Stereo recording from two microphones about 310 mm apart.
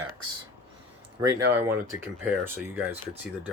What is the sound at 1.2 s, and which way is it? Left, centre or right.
Speech, centre.